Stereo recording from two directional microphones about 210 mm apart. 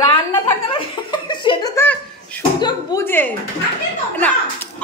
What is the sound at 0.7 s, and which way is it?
A woman's voice, 25° left (ahead or behind).